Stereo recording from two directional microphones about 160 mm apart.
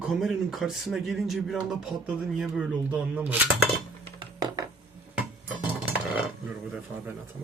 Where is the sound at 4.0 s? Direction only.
25° right (ahead or behind).